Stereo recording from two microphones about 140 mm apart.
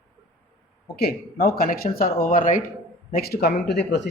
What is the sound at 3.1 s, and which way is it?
Speech, 90° left.